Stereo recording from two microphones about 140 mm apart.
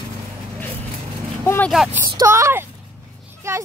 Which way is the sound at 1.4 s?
15° left (ahead or behind).